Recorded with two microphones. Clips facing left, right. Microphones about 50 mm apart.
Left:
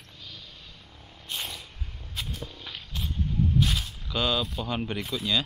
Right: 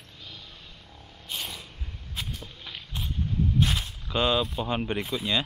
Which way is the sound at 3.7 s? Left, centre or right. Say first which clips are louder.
Right 1 dB; right.